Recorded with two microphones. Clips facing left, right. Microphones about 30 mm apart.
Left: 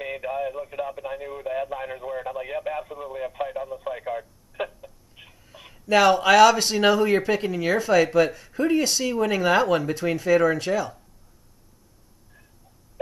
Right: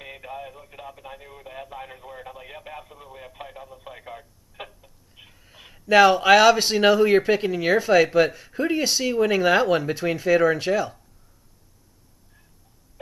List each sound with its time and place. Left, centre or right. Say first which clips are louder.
0.0 s speech: left 9 dB; centre
5.4 s speech: left 1 dB; centre